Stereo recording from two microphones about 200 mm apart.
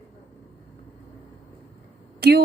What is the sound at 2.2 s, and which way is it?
Speech, 55° right (ahead or behind).